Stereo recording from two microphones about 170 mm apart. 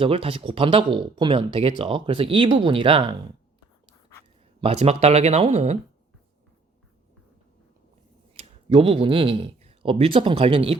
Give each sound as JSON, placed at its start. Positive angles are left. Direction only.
{"t": 0.0, "sound": "speech", "side_deg": -35}
{"t": 4.6, "sound": "speech", "side_deg": -40}
{"t": 8.3, "sound": "speech", "side_deg": -35}